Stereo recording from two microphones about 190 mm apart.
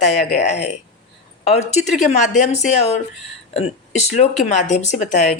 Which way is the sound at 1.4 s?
35° left (ahead or behind).